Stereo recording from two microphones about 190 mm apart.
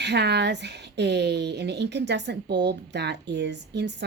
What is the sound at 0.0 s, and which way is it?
A woman's voice, 65° right (ahead or behind).